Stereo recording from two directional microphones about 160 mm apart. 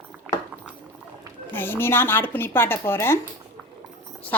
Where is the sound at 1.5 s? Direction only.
15° left (ahead or behind).